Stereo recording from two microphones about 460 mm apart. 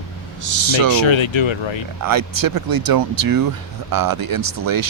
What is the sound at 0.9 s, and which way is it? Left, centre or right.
Speech, left.